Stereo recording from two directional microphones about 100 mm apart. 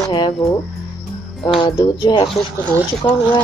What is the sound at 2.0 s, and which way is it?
Speech, 50° left (ahead or behind).